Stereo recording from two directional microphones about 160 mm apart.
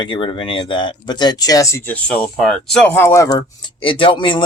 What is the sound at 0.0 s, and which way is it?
Speech, 30° left (ahead or behind).